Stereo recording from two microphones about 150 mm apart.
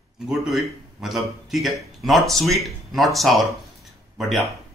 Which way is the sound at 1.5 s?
Centre (ahead or behind).